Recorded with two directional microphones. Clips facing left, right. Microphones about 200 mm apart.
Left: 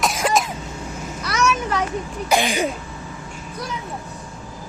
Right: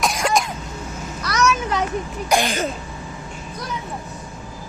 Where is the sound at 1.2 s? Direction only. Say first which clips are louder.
Right 1 dB; 10° left (ahead or behind).